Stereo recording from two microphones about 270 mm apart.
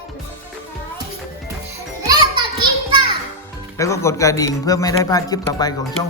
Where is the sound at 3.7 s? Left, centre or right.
Centre.